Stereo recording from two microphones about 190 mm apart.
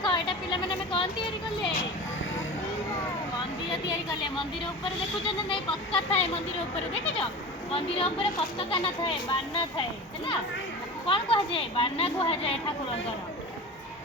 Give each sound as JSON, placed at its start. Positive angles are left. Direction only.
{"t": 0.0, "sound": "sheep", "side_deg": 25}
{"t": 5.2, "sound": "a child's voice", "side_deg": 30}
{"t": 11.0, "sound": "speech", "side_deg": 25}